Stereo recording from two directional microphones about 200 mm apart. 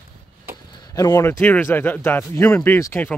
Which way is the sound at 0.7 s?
20° left (ahead or behind).